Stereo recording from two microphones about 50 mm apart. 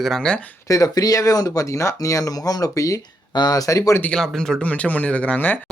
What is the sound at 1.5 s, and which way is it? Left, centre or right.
Speech, left.